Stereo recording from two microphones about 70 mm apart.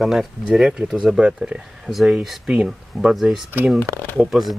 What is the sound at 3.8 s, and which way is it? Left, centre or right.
Speech, left.